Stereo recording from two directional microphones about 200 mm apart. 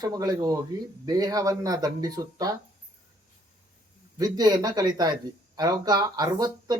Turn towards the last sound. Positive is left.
turn(degrees=-20)  # may be behind; listen again after turning